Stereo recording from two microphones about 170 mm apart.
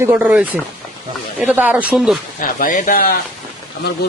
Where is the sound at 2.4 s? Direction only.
50° left (ahead or behind).